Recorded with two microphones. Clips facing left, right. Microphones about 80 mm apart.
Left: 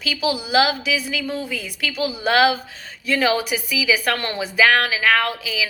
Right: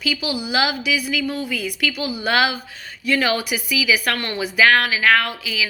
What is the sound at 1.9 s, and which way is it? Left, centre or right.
Speech, centre.